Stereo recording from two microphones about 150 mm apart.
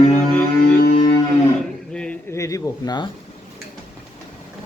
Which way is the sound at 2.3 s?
20° left (ahead or behind).